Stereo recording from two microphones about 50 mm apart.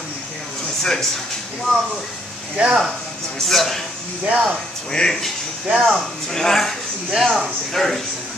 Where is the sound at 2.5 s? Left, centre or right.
Right.